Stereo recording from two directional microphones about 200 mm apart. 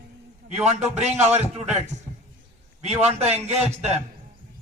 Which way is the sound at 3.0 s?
35° right (ahead or behind).